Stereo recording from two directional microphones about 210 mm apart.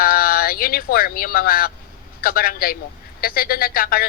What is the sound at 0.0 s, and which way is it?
A woman's voice, 45° left (ahead or behind).